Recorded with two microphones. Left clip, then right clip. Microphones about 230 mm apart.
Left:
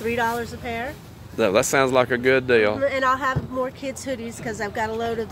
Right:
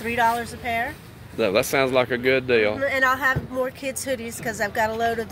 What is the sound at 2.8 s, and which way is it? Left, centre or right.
Speech, right.